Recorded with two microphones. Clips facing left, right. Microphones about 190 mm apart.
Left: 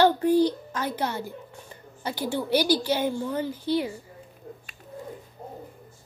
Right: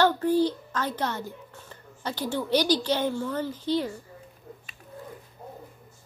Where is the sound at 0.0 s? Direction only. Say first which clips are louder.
Left 2 dB; 15° left (ahead or behind).